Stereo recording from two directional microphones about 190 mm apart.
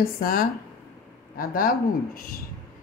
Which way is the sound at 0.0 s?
50° left (ahead or behind).